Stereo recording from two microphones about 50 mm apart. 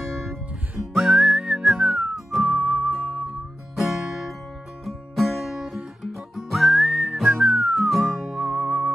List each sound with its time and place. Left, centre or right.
0.1 s music: centre
0.9 s whistling: centre
2.4 s music: right
2.9 s music: centre
5.5 s music: centre
6.0 s whistling: centre
7.9 s music: centre; by 8.9 s right